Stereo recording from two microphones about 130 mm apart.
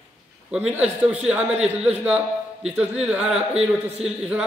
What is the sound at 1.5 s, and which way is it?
Speech, 55° right (ahead or behind).